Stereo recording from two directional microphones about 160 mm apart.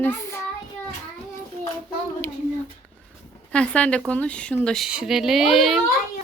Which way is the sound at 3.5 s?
5° left (ahead or behind).